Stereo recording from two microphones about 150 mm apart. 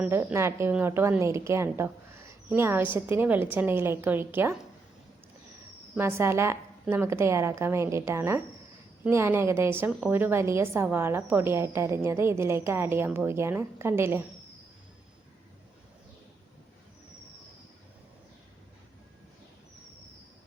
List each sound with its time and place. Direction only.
0.0 s a woman's voice: 10° right (ahead or behind)
5.9 s a woman's voice: 15° right (ahead or behind)